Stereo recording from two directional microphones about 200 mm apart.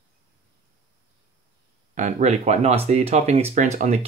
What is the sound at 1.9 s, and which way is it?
Speech, 35° right (ahead or behind).